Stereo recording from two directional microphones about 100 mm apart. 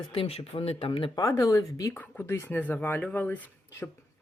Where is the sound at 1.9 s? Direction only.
15° left (ahead or behind).